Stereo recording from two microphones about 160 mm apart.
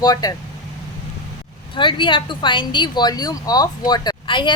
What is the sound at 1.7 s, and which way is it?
Speech, 30° left (ahead or behind).